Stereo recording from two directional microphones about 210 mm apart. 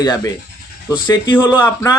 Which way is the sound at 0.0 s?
20° left (ahead or behind).